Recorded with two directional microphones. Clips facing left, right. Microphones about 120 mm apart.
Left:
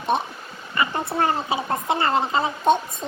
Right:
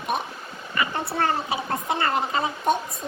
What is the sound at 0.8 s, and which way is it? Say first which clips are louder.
Speech: left 2 dB; 25° left (ahead or behind).